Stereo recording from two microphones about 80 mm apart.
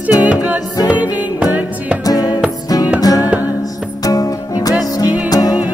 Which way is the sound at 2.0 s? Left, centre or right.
Left.